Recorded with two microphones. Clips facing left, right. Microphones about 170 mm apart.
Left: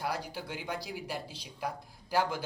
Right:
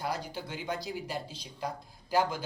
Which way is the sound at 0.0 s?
5° left (ahead or behind).